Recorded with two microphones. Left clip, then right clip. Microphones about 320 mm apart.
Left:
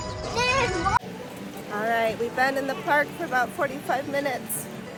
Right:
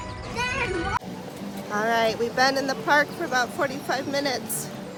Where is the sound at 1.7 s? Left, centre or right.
Centre.